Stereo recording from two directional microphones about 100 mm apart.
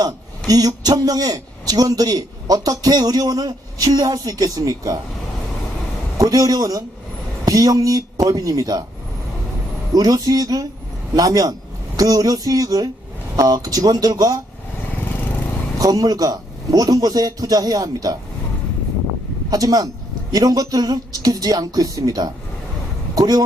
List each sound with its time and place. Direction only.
0.0 s a man's voice: 40° right (ahead or behind)
6.1 s a man's voice: 35° right (ahead or behind)
9.9 s a man's voice: 40° right (ahead or behind)
15.8 s a man's voice: 40° right (ahead or behind)
19.5 s a man's voice: 40° right (ahead or behind)